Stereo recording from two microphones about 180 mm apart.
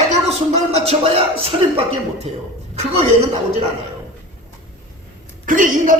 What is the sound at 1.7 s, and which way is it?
Speech, 35° right (ahead or behind).